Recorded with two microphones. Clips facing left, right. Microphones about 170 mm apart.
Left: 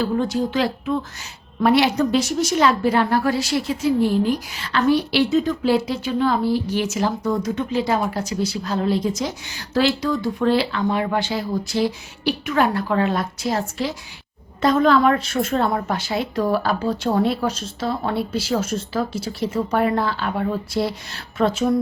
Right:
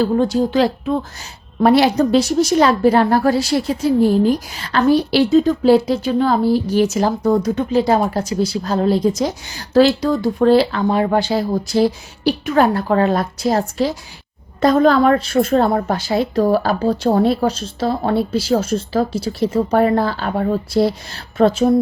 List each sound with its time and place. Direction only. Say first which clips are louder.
0.0 s a woman's voice: right 5 dB; 35° right (ahead or behind)